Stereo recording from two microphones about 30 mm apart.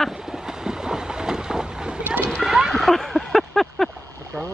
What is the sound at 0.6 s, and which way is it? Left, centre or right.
Boat, right.